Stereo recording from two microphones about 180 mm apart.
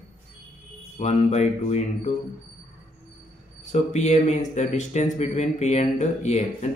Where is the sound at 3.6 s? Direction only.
40° left (ahead or behind).